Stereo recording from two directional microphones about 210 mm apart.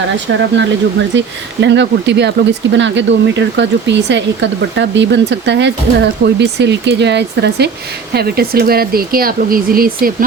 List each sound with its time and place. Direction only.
0.5 s speech: 60° right (ahead or behind); by 10.2 s 45° right (ahead or behind)